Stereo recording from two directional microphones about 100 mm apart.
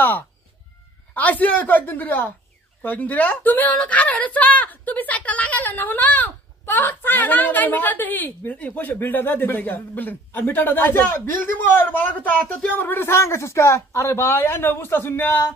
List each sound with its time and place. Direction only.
1.1 s a woman's voice: 15° left (ahead or behind)